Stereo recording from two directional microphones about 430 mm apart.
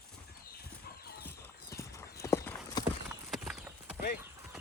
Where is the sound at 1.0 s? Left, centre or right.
Left.